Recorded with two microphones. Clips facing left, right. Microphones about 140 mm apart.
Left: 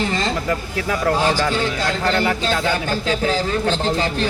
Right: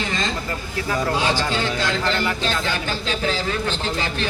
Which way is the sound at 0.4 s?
75° left (ahead or behind).